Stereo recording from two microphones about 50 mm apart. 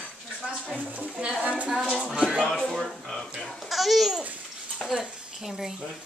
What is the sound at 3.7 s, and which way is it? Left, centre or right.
A woman's voice, centre.